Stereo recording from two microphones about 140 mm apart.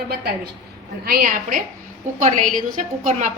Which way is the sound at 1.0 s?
85° right.